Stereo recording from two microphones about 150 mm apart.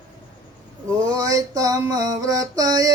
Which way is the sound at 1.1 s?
25° right (ahead or behind).